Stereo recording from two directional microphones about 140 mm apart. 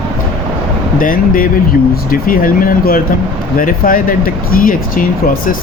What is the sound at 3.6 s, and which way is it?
Speech, 80° left.